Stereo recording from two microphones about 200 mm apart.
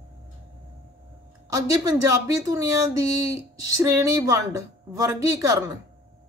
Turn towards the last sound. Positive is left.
turn(degrees=-15)  # may be behind; listen again after turning